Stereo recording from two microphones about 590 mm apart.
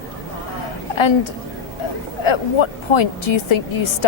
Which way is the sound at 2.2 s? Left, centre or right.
Left.